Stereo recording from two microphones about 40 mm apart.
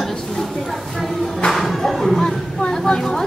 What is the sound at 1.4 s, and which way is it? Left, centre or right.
Music, centre.